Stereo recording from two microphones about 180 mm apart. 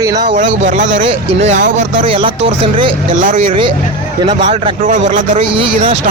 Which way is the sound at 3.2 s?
45° right (ahead or behind).